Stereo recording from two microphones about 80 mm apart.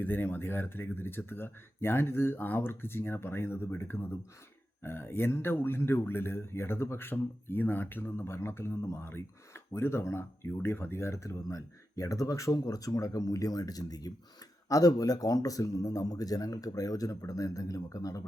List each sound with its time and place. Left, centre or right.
0.0 s speech: left